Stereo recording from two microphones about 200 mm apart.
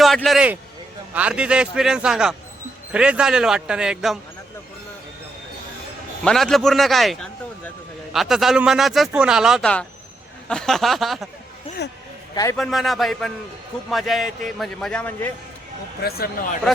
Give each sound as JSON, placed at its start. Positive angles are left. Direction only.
{"t": 0.0, "sound": "a man's voice", "side_deg": 0}
{"t": 6.2, "sound": "a man's voice", "side_deg": 0}
{"t": 12.3, "sound": "a man's voice", "side_deg": 20}
{"t": 12.5, "sound": "speech", "side_deg": 0}
{"t": 16.0, "sound": "a man's voice", "side_deg": 50}